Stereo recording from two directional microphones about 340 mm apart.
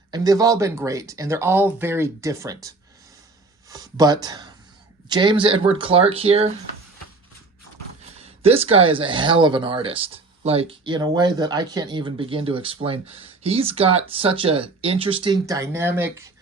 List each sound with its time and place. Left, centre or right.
0.1 s speech: centre
8.1 s speech: centre